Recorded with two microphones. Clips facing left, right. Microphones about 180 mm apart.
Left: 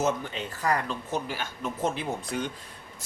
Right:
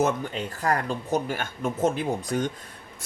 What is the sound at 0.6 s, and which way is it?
Speech, 45° right (ahead or behind).